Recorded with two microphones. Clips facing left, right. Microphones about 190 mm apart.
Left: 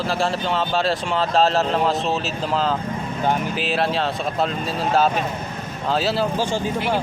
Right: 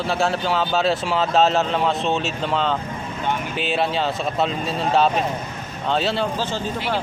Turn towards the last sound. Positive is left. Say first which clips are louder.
# left 3 dB
turn(degrees=15)  # may be behind; listen again after turning